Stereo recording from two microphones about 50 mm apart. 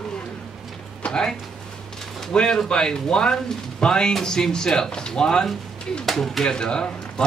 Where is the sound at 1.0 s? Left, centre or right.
Centre.